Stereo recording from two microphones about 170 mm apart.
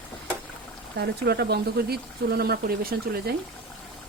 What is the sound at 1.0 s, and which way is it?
Speech, 75° right (ahead or behind).